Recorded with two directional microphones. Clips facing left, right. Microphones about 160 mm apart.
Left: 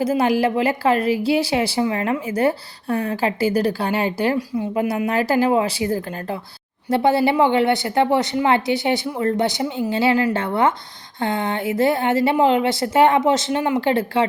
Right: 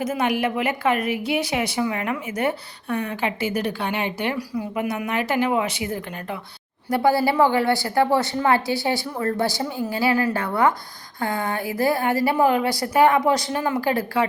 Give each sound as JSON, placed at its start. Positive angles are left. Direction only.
{"t": 0.0, "sound": "speech", "side_deg": 30}
{"t": 4.4, "sound": "speech", "side_deg": 25}
{"t": 6.9, "sound": "a woman's voice", "side_deg": 20}